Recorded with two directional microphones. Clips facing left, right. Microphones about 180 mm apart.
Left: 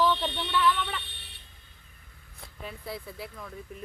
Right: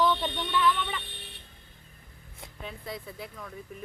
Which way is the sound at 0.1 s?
15° right (ahead or behind).